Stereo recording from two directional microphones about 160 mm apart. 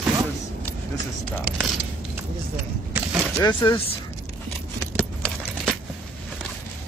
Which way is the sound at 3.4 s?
20° left (ahead or behind).